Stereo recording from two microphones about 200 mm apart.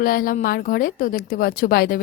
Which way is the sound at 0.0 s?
45° left (ahead or behind).